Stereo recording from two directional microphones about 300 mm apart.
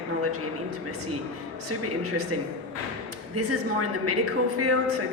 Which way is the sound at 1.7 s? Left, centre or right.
Right.